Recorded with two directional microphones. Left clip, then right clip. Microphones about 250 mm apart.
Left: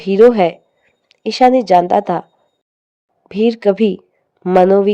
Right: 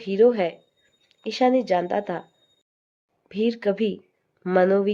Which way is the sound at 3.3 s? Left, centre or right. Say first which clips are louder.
Left 10 dB; left.